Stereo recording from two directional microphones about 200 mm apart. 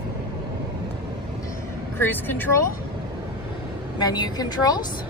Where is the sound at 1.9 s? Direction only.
10° left (ahead or behind).